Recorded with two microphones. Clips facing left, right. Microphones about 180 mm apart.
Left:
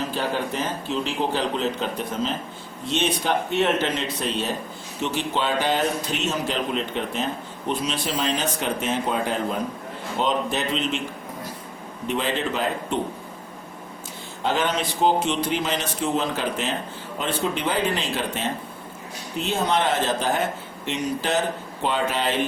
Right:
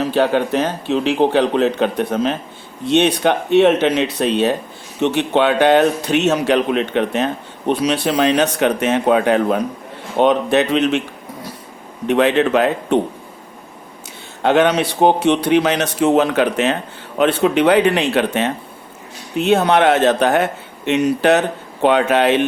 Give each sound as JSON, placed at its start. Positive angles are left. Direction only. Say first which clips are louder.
{"t": 0.0, "sound": "speech", "louder": "right 10 dB", "side_deg": -70}
{"t": 12.0, "sound": "speech", "louder": "right 11 dB", "side_deg": -70}
{"t": 14.4, "sound": "speech", "louder": "right 10 dB", "side_deg": -70}